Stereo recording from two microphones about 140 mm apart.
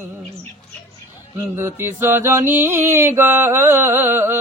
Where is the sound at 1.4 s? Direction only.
15° right (ahead or behind).